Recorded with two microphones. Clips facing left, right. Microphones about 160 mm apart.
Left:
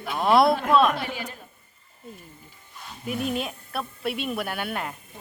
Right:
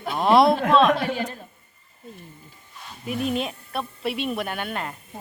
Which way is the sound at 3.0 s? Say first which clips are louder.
Right 2 dB; centre (ahead or behind).